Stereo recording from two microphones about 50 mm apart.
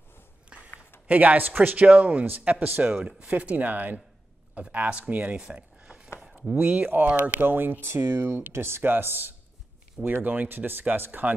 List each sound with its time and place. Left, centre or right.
0.5 s a sound: centre
1.0 s speech: right
2.8 s speech: centre
7.4 s a man's voice: right
7.8 s speech: right
8.8 s a man's voice: right